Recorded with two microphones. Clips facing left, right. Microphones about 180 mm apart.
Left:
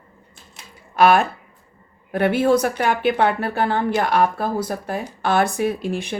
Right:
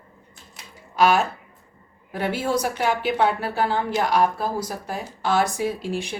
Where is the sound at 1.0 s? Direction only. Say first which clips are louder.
Left 4 dB; 60° left (ahead or behind).